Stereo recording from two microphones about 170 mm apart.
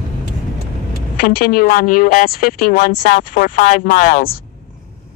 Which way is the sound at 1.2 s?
55° left (ahead or behind).